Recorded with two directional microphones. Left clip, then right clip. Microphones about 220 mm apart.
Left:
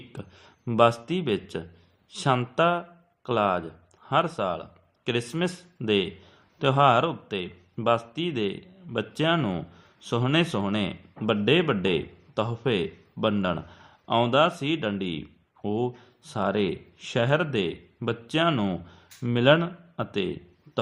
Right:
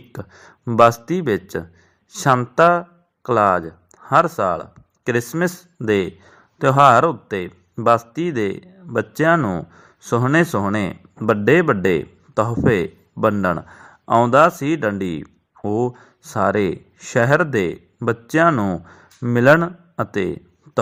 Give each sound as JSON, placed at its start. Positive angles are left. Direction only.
{"t": 0.1, "sound": "speech", "side_deg": -30}
{"t": 5.8, "sound": "speech", "side_deg": -30}